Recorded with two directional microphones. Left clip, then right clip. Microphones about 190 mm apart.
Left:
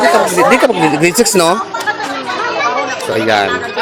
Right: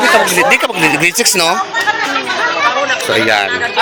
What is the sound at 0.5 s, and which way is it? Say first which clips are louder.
Speech: left 1 dB; 30° left (ahead or behind).